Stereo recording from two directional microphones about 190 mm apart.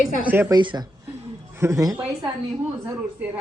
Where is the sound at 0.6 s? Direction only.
25° right (ahead or behind).